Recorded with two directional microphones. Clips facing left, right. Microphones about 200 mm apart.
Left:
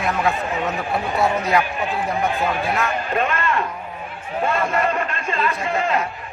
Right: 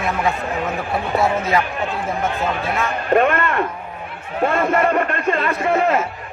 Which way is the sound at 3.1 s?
55° right (ahead or behind).